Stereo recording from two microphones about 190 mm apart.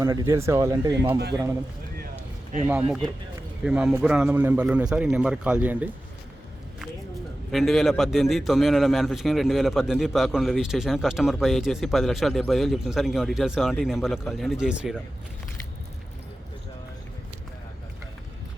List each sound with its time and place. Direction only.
0.0 s speech: 20° right (ahead or behind)
3.6 s a man's voice: 5° right (ahead or behind)
7.5 s a man's voice: centre (ahead or behind)